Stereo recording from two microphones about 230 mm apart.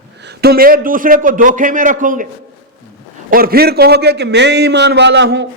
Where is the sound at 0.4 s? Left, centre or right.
Right.